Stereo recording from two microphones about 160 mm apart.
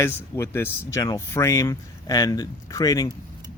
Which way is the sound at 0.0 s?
15° left (ahead or behind).